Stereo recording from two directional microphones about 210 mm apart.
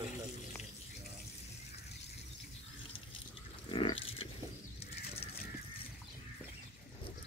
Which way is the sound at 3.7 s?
25° left (ahead or behind).